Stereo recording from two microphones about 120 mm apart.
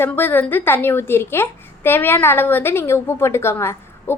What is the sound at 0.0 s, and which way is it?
A woman's voice, 15° left (ahead or behind).